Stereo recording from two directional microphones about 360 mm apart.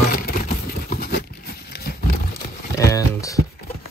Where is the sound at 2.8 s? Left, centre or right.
Centre.